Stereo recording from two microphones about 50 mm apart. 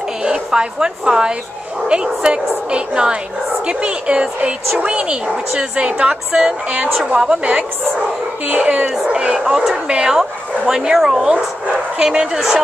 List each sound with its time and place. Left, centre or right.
0.2 s a woman's voice: centre
7.2 s a woman's voice: right